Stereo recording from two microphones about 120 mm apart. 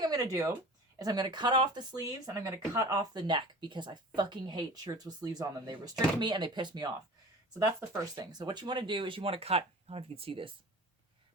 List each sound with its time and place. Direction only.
0.0 s speech: 30° right (ahead or behind); by 10.5 s 50° right (ahead or behind)